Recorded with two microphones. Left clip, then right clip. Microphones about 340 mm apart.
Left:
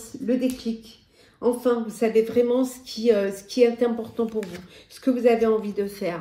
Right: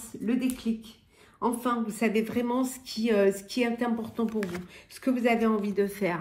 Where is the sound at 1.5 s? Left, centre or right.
Right.